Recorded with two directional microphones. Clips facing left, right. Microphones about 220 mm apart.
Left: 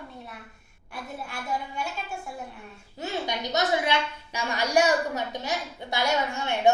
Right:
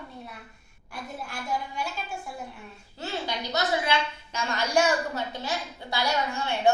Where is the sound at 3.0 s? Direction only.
15° left (ahead or behind).